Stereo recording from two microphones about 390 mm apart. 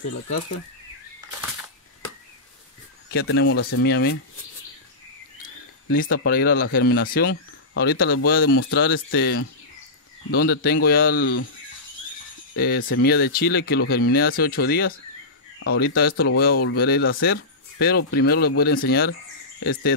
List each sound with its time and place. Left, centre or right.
3.1 s speech: left
5.9 s speech: left
12.5 s speech: left